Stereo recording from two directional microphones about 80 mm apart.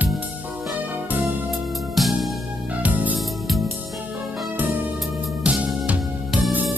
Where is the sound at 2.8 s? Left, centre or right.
Centre.